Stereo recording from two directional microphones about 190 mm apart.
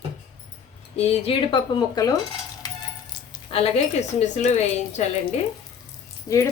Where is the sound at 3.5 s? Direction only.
30° left (ahead or behind).